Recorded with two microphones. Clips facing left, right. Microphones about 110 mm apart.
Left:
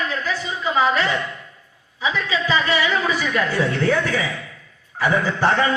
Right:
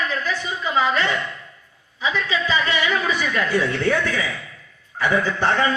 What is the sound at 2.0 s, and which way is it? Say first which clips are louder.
A man's voice: left 1 dB; 20° left (ahead or behind).